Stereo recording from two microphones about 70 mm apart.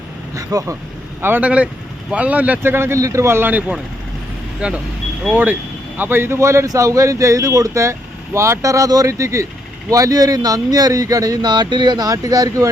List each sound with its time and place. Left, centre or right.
0.3 s speech: right
1.4 s speech: centre
2.7 s speech: right
3.0 s speech: right
4.6 s speech: centre; by 12.1 s right
12.1 s speech: right